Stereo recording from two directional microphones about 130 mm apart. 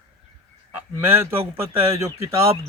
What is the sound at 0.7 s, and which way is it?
A man's voice, 15° right (ahead or behind).